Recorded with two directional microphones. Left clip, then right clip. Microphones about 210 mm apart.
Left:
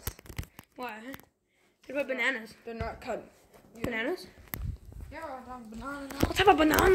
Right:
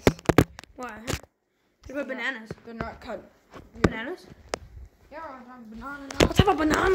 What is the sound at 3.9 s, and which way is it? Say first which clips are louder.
Speech: left 2 dB; 15° left (ahead or behind).